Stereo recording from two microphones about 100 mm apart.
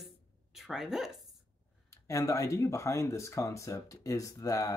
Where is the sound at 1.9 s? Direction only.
30° left (ahead or behind).